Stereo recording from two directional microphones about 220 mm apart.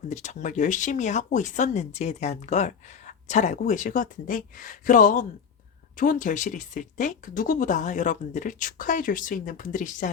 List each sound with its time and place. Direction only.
0.1 s speech: 30° left (ahead or behind)